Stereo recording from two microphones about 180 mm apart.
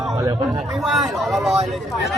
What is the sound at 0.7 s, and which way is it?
Speech, centre (ahead or behind).